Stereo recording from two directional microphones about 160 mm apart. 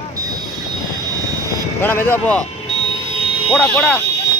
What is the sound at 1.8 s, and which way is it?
Speech, 15° left (ahead or behind).